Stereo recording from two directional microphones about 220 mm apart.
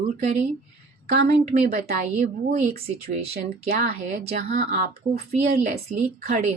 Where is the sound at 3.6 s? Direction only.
40° right (ahead or behind).